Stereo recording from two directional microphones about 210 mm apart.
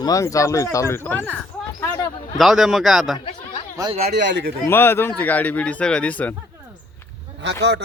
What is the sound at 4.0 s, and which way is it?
Speech, 55° right (ahead or behind).